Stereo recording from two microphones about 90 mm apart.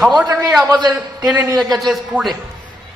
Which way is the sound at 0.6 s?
45° right (ahead or behind).